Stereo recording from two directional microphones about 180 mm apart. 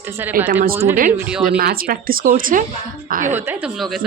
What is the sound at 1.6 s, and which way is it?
Speech, 55° right (ahead or behind).